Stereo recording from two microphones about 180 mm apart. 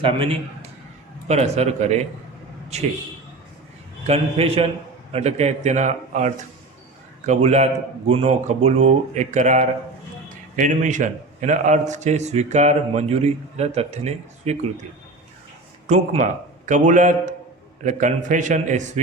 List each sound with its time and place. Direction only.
0.0 s a man's voice: 30° right (ahead or behind)
4.0 s a man's voice: 35° right (ahead or behind)
15.9 s a man's voice: 40° right (ahead or behind)